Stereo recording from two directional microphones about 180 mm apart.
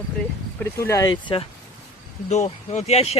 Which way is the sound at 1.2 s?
25° left (ahead or behind).